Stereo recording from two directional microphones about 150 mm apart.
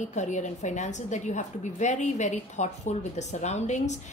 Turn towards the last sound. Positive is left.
turn(degrees=50)  # may be behind; listen again after turning